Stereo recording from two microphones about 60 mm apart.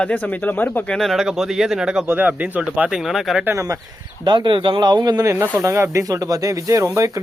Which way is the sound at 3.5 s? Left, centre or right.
Right.